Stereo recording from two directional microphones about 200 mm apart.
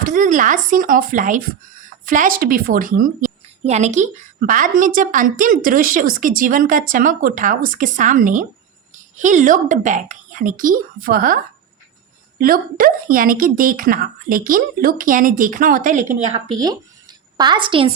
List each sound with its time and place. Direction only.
0.0 s a woman's voice: 40° right (ahead or behind)
12.4 s a woman's voice: 45° right (ahead or behind)
16.6 s speech: 20° right (ahead or behind)